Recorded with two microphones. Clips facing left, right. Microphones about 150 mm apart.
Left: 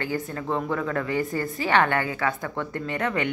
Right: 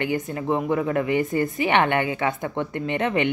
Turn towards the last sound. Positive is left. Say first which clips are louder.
# right 4 dB
turn(degrees=-20)  # may be behind; listen again after turning